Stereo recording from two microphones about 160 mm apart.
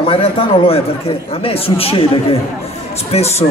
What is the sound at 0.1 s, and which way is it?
A man's voice, 35° left (ahead or behind).